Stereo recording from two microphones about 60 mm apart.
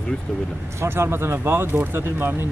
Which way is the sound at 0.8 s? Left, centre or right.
Right.